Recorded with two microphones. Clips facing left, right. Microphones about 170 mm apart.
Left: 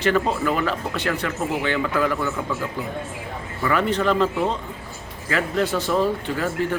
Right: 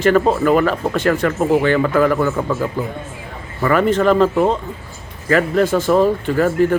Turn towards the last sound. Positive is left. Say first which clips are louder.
# right 7 dB
turn(degrees=-50)  # may be behind; listen again after turning